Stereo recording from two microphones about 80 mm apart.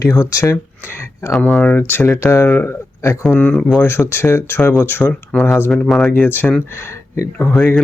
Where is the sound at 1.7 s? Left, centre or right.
Left.